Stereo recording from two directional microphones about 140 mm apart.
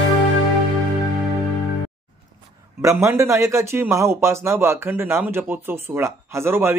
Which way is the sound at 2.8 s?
20° right (ahead or behind).